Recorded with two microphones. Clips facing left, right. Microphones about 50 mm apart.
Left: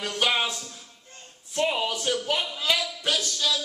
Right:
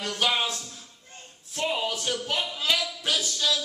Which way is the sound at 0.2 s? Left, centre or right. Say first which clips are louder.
Left 1 dB; centre.